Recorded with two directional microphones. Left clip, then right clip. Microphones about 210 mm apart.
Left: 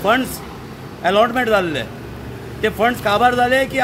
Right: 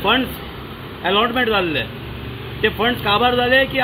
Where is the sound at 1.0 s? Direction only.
25° left (ahead or behind).